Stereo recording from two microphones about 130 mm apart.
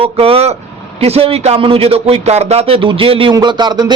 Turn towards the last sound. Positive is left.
turn(degrees=-35)  # may be behind; listen again after turning